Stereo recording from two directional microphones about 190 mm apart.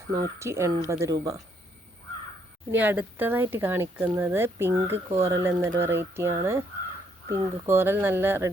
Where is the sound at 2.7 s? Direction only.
10° right (ahead or behind).